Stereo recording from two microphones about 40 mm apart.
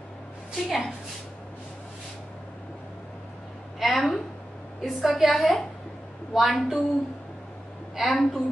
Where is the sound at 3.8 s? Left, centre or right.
Centre.